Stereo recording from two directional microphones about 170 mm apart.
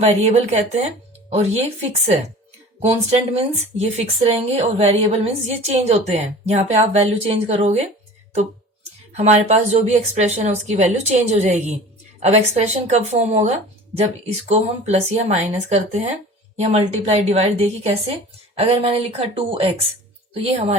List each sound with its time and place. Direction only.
0.0 s speech: 40° right (ahead or behind)
9.1 s speech: 40° right (ahead or behind)